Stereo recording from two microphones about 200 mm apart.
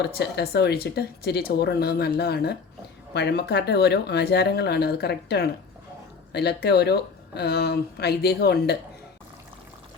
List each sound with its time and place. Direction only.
0.0 s speech: 55° left (ahead or behind)